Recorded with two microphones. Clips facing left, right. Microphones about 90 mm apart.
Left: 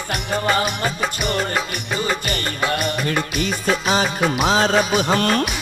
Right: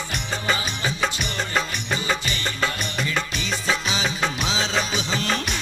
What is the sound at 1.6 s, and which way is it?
Music of bollywood, centre (ahead or behind).